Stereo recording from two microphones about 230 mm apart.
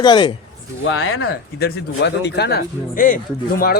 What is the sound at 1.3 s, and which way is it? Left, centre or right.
Speech, left.